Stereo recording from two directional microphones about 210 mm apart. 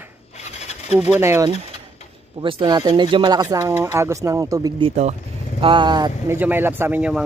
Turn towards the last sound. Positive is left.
turn(degrees=-5)  # may be behind; listen again after turning